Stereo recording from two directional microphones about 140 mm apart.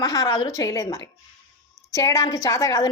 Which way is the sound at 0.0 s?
25° left (ahead or behind).